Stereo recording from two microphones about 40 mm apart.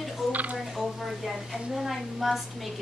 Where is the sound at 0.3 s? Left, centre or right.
Right.